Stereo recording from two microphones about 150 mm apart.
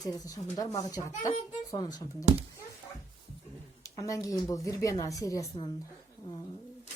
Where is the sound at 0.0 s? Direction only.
25° left (ahead or behind).